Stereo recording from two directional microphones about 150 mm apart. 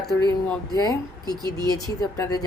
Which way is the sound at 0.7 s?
25° left (ahead or behind).